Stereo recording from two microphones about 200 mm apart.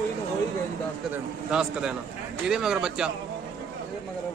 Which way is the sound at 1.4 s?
5° right (ahead or behind).